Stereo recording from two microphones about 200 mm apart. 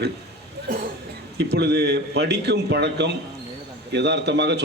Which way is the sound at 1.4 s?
60° right (ahead or behind).